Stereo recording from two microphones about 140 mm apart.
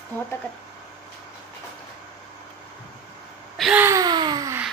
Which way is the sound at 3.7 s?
20° right (ahead or behind).